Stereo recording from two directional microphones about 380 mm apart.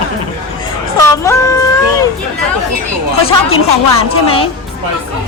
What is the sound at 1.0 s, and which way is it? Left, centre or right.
Speech, centre.